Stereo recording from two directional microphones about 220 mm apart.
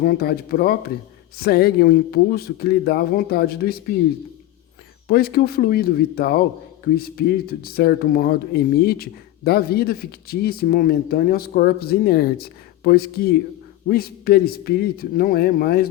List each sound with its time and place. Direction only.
0.0 s speech: 45° left (ahead or behind)
5.0 s speech: 45° left (ahead or behind)